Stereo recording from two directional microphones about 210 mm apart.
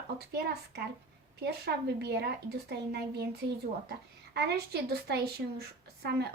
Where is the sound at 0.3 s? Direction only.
50° right (ahead or behind).